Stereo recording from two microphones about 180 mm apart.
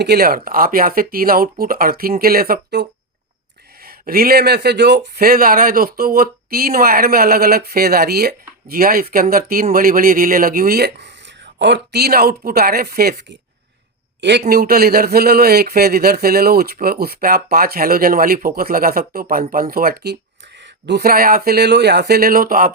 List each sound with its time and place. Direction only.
0.0 s speech: 60° right (ahead or behind)
3.8 s speech: 55° right (ahead or behind)
14.2 s a man's voice: 70° right (ahead or behind)
14.5 s speech: 55° right (ahead or behind)